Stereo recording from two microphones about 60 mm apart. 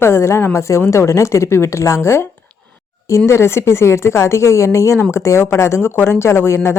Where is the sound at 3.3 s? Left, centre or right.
Left.